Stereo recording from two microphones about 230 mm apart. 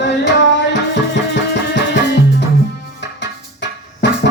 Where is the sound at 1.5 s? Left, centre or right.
Left.